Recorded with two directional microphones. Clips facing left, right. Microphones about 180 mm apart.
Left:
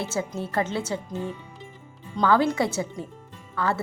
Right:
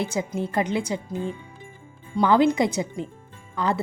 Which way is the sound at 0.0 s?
15° right (ahead or behind).